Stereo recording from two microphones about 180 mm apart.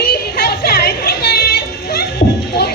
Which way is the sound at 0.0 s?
60° left (ahead or behind).